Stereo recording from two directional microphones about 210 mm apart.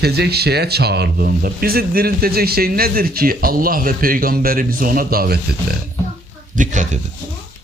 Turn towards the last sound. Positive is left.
turn(degrees=-35)  # may be behind; listen again after turning